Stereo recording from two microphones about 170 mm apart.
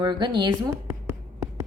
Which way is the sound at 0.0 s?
25° right (ahead or behind).